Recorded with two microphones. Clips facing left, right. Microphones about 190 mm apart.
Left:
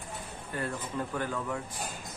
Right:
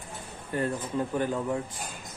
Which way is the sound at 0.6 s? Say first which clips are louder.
Right 5 dB; 20° right (ahead or behind).